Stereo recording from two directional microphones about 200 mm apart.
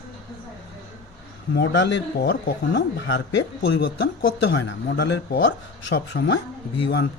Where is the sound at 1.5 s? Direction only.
65° left (ahead or behind).